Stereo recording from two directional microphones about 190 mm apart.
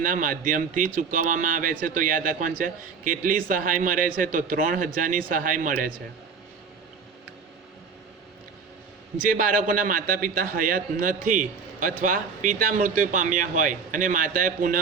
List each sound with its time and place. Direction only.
0.0 s a man's voice: 45° right (ahead or behind)
9.2 s a man's voice: 45° right (ahead or behind)